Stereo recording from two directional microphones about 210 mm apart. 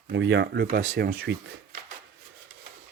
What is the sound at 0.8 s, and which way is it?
Speech, 65° right (ahead or behind).